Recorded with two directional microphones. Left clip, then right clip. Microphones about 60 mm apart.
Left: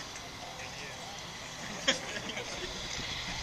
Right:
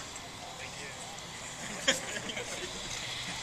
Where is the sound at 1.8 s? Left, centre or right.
Centre.